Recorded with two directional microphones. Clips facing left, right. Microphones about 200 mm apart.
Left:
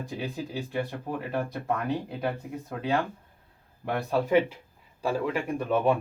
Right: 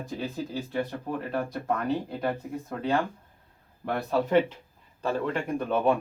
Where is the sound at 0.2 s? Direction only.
10° left (ahead or behind).